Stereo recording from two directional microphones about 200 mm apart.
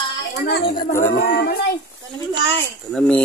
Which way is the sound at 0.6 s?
25° left (ahead or behind).